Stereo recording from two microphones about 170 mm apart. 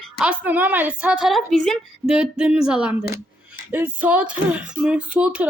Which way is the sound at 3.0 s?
60° left (ahead or behind).